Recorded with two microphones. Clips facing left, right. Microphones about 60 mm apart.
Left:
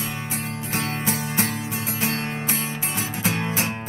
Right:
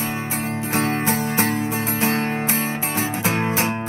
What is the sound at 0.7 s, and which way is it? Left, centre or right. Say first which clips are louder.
Music: right 5 dB; right.